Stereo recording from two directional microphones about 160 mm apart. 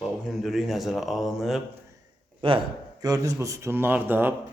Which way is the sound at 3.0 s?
20° right (ahead or behind).